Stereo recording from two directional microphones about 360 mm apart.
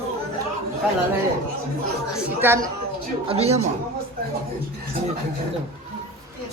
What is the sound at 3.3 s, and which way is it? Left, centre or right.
Speech, centre.